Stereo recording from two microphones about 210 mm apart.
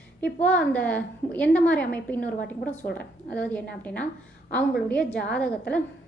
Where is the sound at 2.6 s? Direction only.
35° left (ahead or behind).